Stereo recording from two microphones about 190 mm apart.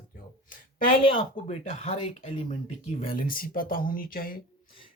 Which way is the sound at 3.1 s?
50° left (ahead or behind).